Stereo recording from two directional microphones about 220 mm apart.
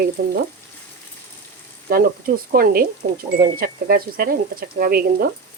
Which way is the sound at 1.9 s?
40° right (ahead or behind).